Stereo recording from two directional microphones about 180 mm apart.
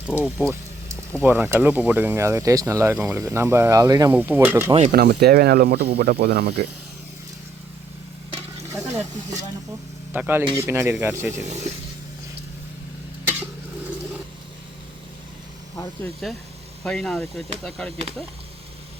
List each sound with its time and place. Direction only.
0.3 s speech: 10° right (ahead or behind)
2.9 s speech: 5° right (ahead or behind)
3.2 s speech: 15° right (ahead or behind)
4.9 s speech: 60° right (ahead or behind)
8.7 s snake: 15° right (ahead or behind)
10.1 s speech: 10° right (ahead or behind)
11.4 s speech: 40° right (ahead or behind)
16.2 s speech: centre (ahead or behind)